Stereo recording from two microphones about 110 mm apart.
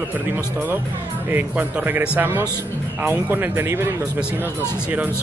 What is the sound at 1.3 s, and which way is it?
Speech, 20° right (ahead or behind).